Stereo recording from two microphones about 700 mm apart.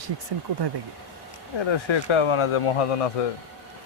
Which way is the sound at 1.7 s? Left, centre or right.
Left.